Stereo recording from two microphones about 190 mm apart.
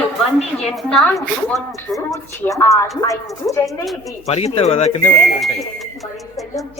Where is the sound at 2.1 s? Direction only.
15° left (ahead or behind).